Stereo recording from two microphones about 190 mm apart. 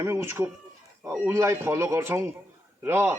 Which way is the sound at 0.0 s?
15° right (ahead or behind).